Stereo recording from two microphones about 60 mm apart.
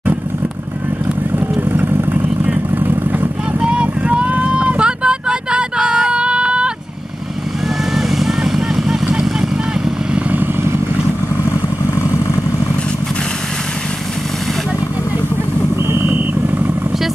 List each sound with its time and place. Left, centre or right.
1.6 s vehicle: right
3.5 s vehicle: centre
7.9 s vehicle: centre
10.3 s vehicle: right
15.9 s vehicle: right